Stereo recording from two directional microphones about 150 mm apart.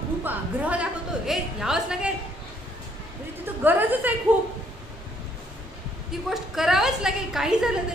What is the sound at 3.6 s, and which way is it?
Speech, 10° right (ahead or behind).